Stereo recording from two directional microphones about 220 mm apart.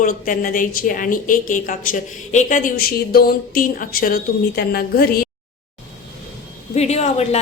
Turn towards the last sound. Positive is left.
turn(degrees=30)  # may be behind; listen again after turning